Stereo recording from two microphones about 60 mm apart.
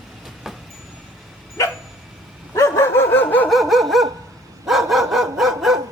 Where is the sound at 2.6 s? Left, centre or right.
Left.